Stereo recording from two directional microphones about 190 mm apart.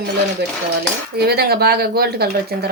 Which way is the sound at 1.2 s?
55° right (ahead or behind).